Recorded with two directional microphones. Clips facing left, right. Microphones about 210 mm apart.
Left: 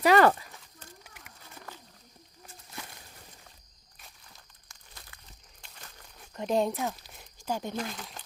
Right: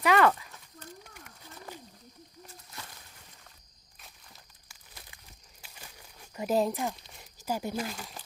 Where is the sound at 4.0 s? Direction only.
Centre (ahead or behind).